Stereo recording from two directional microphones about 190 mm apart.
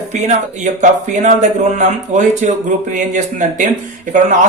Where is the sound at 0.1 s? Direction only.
35° right (ahead or behind).